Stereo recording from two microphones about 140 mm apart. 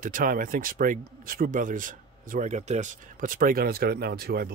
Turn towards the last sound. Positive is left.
turn(degrees=-90)